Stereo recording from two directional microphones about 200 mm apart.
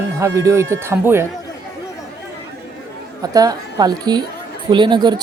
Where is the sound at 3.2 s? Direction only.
20° right (ahead or behind).